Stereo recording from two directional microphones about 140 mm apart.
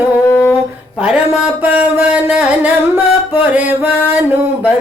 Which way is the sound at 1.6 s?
10° right (ahead or behind).